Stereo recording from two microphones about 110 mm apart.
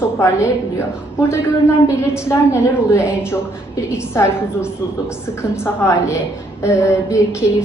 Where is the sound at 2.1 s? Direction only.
25° left (ahead or behind).